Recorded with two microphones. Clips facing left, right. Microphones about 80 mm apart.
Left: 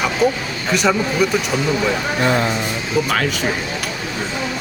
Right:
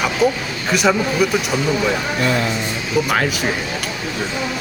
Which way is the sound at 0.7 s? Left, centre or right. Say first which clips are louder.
Right 1 dB; centre.